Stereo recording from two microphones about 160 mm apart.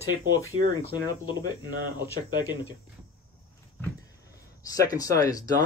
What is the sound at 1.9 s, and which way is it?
Speech, 15° right (ahead or behind).